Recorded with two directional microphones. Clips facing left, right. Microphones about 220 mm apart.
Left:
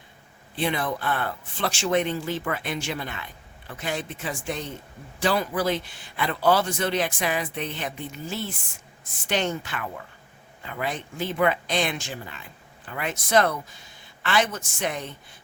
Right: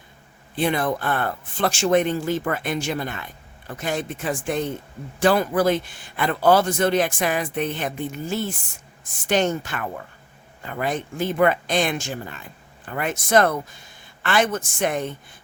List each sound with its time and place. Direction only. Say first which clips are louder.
0.5 s speech: right 4 dB; 45° right (ahead or behind)